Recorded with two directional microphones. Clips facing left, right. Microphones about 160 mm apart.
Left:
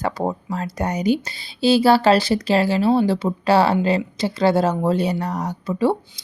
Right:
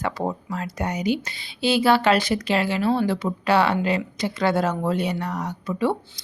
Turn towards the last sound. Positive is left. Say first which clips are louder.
# left 4 dB
turn(degrees=30)  # may be behind; listen again after turning